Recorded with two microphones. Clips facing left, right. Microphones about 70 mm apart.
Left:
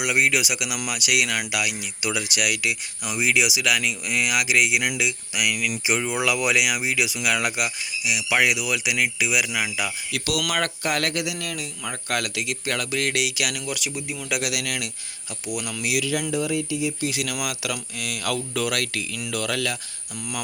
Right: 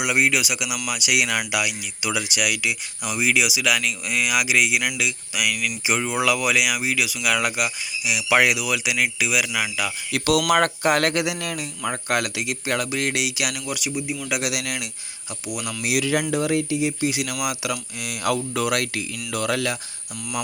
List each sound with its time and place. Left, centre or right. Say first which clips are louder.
0.0 s speech: right 1 dB; centre
8.5 s speech: right 1 dB; centre
10.1 s speech: right 9 dB; right
12.1 s speech: right 1 dB; centre
15.8 s speech: right 2 dB; right
16.3 s speech: right 3 dB; right
16.6 s speech: right 3 dB; right
17.1 s speech: right 2 dB; centre